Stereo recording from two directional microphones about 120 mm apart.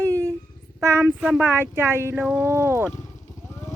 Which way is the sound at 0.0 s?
25° right (ahead or behind).